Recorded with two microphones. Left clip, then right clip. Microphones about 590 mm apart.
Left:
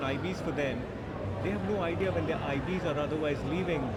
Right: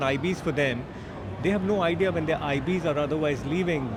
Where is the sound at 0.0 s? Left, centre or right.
Right.